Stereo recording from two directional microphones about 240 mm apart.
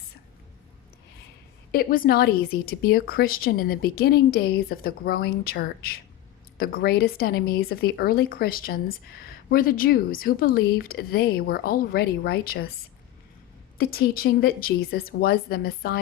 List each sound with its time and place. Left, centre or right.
1.7 s speech: left
13.7 s speech: left